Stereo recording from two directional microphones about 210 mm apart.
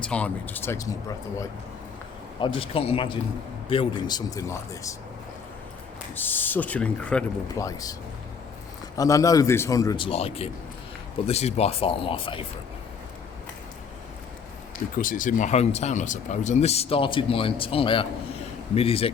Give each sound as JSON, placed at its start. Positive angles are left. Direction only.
{"t": 0.0, "sound": "a man's voice", "side_deg": 5}
{"t": 2.4, "sound": "a man's voice", "side_deg": 25}
{"t": 6.1, "sound": "a man's voice", "side_deg": 10}
{"t": 7.4, "sound": "a man's voice", "side_deg": 15}
{"t": 9.0, "sound": "a man's voice", "side_deg": 15}
{"t": 14.9, "sound": "speech", "side_deg": 40}